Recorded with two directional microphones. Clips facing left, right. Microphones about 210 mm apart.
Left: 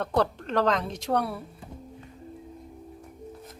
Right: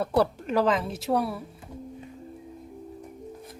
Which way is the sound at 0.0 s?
10° right (ahead or behind).